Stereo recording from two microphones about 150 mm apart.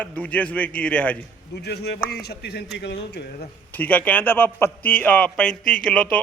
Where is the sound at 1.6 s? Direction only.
90° left.